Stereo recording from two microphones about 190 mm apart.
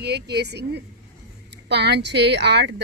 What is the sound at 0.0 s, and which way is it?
Speech, 60° right (ahead or behind).